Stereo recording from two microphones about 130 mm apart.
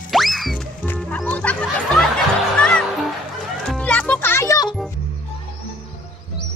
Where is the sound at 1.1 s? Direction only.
10° left (ahead or behind).